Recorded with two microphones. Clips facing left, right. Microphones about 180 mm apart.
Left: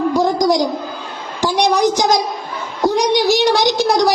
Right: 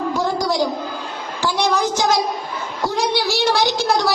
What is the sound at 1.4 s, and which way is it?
A woman's voice, 15° left (ahead or behind).